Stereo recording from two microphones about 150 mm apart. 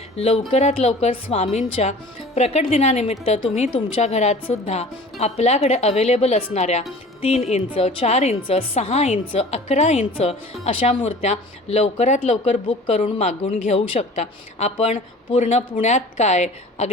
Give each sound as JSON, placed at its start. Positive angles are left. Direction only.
{"t": 0.2, "sound": "a woman's voice", "side_deg": 40}